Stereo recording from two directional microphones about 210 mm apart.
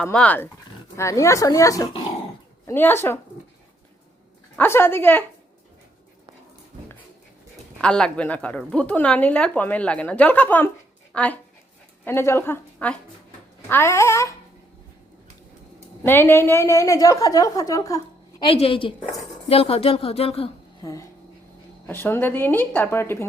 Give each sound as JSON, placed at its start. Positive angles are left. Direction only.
{"t": 0.0, "sound": "a woman's voice", "side_deg": 5}
{"t": 4.5, "sound": "a woman's voice", "side_deg": 10}
{"t": 7.8, "sound": "a woman's voice", "side_deg": 5}
{"t": 16.0, "sound": "a woman's voice", "side_deg": 10}
{"t": 20.8, "sound": "a woman's voice", "side_deg": 15}